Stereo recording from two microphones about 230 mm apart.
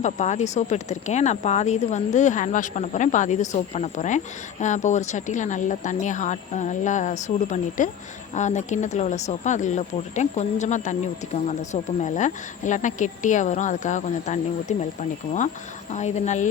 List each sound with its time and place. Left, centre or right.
0.0 s speech: left
15.9 s speech: left